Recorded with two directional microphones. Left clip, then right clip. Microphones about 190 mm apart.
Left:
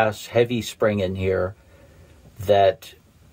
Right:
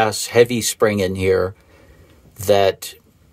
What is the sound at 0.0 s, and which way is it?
Speech, 30° right (ahead or behind).